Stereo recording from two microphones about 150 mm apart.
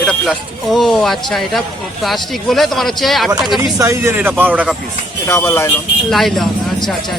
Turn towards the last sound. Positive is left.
turn(degrees=0)  # may be behind; listen again after turning